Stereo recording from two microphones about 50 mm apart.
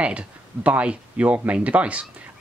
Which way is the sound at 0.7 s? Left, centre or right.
Right.